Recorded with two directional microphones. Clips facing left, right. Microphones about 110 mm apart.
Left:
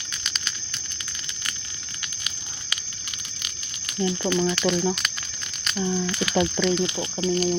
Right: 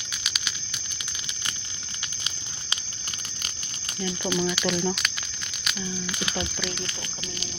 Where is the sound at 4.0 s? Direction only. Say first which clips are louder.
Left 6 dB; 25° left (ahead or behind).